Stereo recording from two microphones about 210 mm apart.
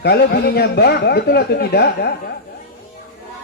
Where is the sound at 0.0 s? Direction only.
50° left (ahead or behind).